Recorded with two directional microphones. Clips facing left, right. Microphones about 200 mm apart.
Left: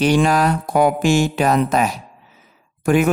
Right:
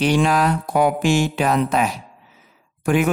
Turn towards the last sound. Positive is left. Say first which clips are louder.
# left 3 dB
turn(degrees=45)  # may be behind; listen again after turning